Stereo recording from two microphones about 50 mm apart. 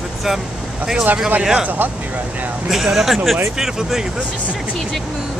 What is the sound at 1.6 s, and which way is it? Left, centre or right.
Speech, right.